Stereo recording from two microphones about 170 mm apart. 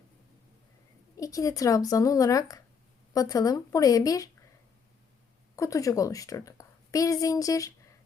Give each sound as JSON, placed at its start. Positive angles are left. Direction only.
{"t": 1.1, "sound": "speech", "side_deg": 20}
{"t": 5.5, "sound": "a woman's voice", "side_deg": 20}